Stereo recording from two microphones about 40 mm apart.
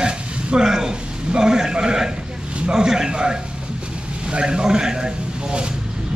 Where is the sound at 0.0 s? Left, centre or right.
Right.